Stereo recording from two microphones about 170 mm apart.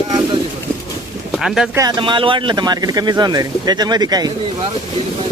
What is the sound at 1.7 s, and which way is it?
Speech, 25° right (ahead or behind).